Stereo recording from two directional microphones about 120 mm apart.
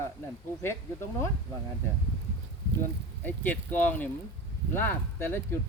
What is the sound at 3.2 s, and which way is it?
Speech, 15° left (ahead or behind).